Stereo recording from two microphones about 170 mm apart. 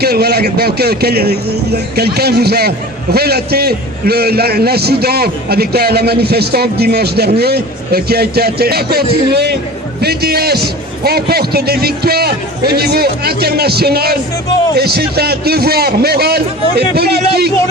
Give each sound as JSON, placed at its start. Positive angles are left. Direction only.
{"t": 0.0, "sound": "a man's voice", "side_deg": -70}